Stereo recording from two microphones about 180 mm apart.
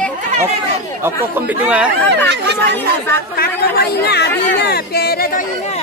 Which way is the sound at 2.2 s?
70° right (ahead or behind).